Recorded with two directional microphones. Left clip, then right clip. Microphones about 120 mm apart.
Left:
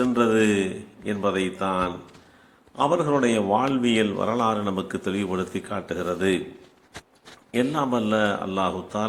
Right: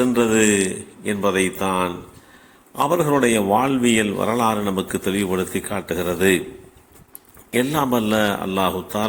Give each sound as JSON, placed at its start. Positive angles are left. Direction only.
{"t": 0.0, "sound": "a man's voice", "side_deg": -35}
{"t": 7.5, "sound": "a man's voice", "side_deg": -40}